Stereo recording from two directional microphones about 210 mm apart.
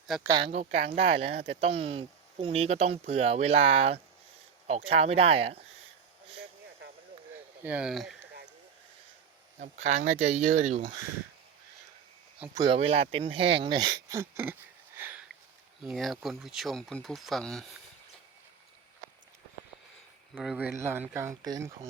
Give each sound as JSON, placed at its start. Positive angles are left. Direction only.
{"t": 0.3, "sound": "speech", "side_deg": -25}
{"t": 7.6, "sound": "speech", "side_deg": -5}
{"t": 9.6, "sound": "speech", "side_deg": -35}
{"t": 12.5, "sound": "speech", "side_deg": -25}
{"t": 14.9, "sound": "sniff", "side_deg": -10}
{"t": 15.8, "sound": "speech", "side_deg": 0}
{"t": 20.3, "sound": "speech", "side_deg": -5}